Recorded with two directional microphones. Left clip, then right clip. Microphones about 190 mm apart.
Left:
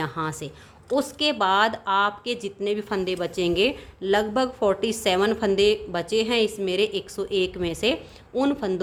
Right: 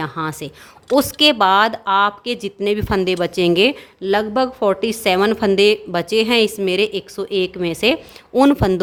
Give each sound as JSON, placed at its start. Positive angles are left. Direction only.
{"t": 0.0, "sound": "a woman's voice", "side_deg": -20}